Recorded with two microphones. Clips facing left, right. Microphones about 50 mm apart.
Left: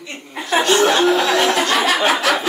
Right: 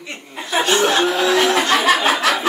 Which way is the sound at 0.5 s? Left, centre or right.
Centre.